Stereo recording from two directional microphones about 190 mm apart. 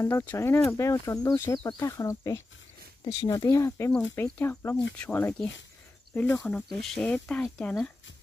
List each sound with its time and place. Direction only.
0.0 s speech: 15° left (ahead or behind)